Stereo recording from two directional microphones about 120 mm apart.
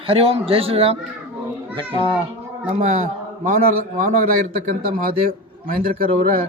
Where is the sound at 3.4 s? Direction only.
90° right.